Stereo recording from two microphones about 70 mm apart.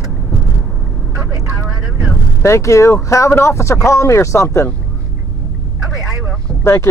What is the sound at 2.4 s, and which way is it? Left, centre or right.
Speech, left.